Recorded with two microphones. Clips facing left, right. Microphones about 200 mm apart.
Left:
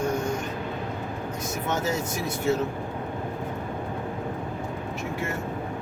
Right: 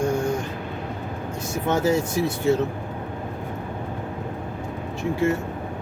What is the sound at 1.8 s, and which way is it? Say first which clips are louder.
Speech: right 7 dB; 30° right (ahead or behind).